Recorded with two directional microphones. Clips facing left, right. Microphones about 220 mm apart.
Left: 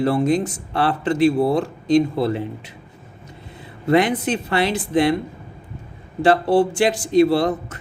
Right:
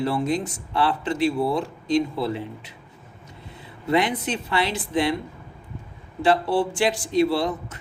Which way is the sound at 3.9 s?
45° left (ahead or behind).